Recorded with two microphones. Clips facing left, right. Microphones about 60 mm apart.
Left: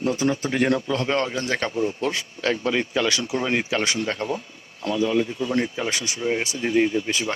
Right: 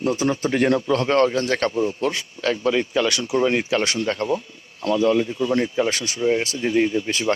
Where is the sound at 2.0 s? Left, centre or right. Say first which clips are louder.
Right 2 dB; left.